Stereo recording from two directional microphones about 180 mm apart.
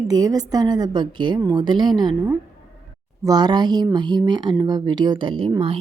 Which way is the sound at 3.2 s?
20° right (ahead or behind).